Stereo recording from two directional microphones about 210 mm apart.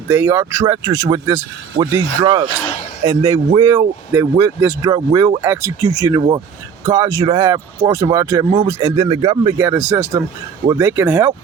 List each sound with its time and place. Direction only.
0.1 s speech: 10° right (ahead or behind)
9.6 s speech: 10° right (ahead or behind)